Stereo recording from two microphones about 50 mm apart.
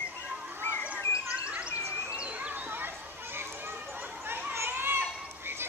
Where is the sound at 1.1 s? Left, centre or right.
Right.